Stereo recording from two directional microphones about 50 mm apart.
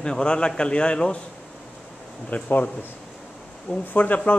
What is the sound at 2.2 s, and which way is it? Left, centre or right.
Speech, left.